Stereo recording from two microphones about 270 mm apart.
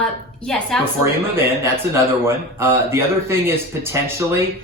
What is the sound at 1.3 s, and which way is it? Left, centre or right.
A man's voice, centre.